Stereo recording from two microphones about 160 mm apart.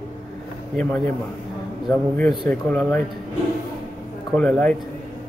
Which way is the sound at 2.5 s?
10° left (ahead or behind).